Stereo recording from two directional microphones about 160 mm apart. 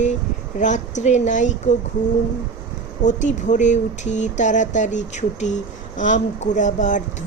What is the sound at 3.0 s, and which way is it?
Speech, 50° left (ahead or behind).